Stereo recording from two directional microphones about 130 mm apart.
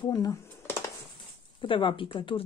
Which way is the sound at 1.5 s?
40° left (ahead or behind).